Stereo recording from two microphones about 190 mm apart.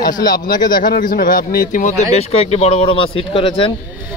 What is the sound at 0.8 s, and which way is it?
A man's voice, 50° left (ahead or behind).